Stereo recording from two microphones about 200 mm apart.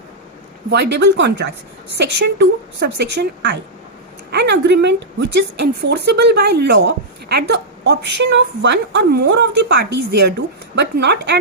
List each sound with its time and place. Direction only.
0.7 s a woman's voice: 55° right (ahead or behind)